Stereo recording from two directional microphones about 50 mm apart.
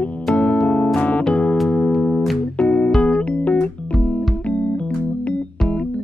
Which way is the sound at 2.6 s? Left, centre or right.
Left.